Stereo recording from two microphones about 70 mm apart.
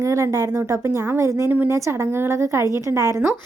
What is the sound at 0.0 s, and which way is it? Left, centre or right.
A woman's voice, right.